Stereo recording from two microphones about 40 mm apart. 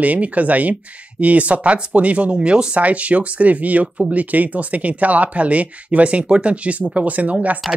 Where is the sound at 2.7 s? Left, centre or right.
Right.